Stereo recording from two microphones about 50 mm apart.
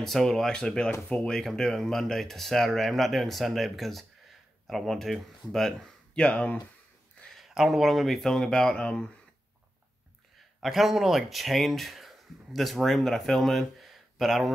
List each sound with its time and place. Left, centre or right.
0.0 s speech: centre
6.1 s speech: left
7.2 s speech: centre; by 9.0 s left
10.6 s speech: centre